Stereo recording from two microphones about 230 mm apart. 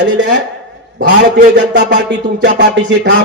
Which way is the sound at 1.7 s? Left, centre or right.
Right.